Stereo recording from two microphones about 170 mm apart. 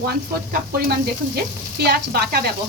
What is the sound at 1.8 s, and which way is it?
Sizzle, 70° right (ahead or behind).